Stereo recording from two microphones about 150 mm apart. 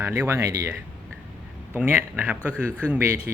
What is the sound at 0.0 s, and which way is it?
A man's voice, 15° right (ahead or behind).